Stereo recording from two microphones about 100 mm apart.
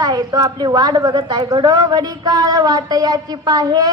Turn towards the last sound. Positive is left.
turn(degrees=-40)  # may be behind; listen again after turning